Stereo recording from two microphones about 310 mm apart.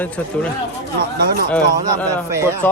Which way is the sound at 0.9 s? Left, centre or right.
Right.